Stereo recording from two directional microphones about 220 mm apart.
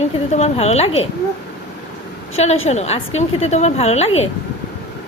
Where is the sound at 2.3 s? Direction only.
30° left (ahead or behind).